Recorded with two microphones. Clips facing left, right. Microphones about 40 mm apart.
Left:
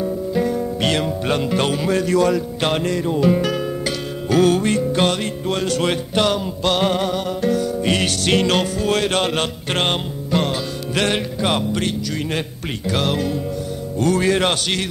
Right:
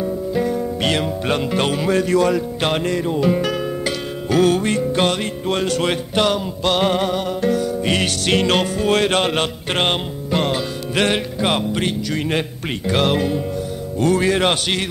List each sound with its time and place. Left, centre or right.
0.0 s music: centre
6.9 s music: right
8.5 s speech: right
9.4 s music: centre
11.1 s speech: centre
14.2 s music: centre